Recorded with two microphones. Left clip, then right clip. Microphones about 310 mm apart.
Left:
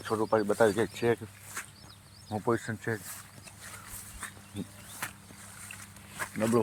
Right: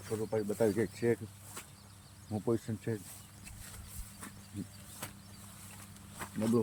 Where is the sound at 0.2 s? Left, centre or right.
Left.